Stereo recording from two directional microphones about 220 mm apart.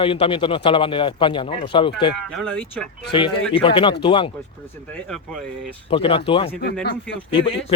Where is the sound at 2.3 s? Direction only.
5° left (ahead or behind).